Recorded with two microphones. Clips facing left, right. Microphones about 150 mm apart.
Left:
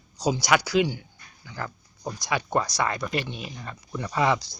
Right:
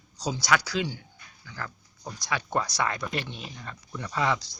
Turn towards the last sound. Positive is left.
turn(degrees=15)  # may be behind; listen again after turning